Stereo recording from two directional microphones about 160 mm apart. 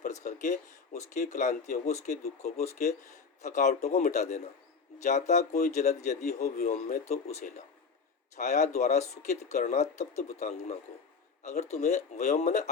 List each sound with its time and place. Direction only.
0.0 s speech: 50° left (ahead or behind)